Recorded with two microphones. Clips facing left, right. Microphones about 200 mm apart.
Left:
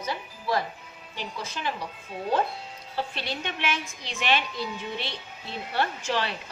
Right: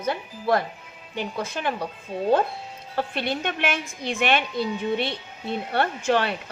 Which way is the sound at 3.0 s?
55° right (ahead or behind).